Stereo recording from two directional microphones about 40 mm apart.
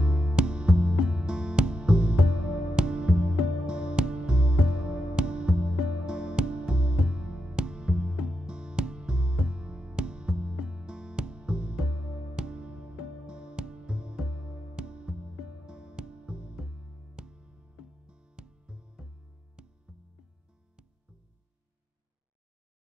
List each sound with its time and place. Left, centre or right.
0.0 s music: right